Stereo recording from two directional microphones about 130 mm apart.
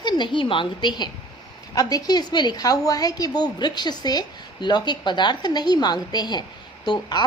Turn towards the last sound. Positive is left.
turn(degrees=35)  # may be behind; listen again after turning